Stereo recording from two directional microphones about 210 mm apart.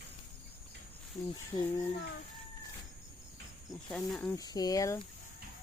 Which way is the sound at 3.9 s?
5° left (ahead or behind).